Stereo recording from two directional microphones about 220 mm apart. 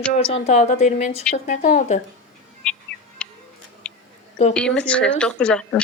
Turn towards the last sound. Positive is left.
turn(degrees=5)  # may be behind; listen again after turning